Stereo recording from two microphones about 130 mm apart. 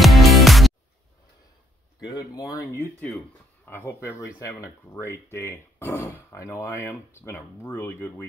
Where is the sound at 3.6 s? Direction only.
20° left (ahead or behind).